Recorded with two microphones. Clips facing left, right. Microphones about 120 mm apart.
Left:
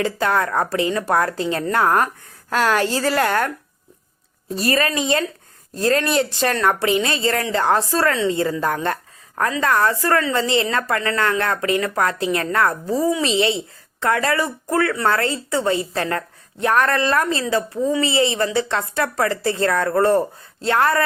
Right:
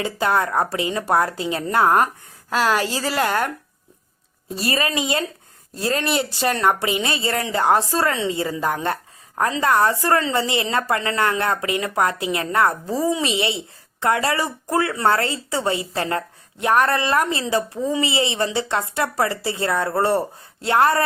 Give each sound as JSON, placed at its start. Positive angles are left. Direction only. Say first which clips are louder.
{"t": 0.0, "sound": "a woman's voice", "louder": "left 1 dB", "side_deg": -15}
{"t": 20.7, "sound": "a woman's voice", "louder": "right 1 dB", "side_deg": -20}